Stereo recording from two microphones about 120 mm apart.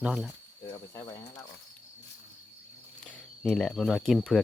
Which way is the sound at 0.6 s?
25° left (ahead or behind).